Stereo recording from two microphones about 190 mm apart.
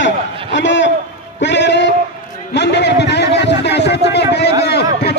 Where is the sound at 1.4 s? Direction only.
70° left (ahead or behind).